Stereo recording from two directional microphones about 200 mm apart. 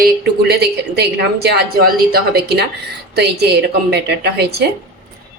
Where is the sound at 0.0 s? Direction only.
55° right (ahead or behind).